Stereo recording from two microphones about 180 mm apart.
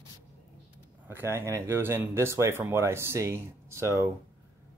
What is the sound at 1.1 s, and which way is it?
Speech, 15° right (ahead or behind).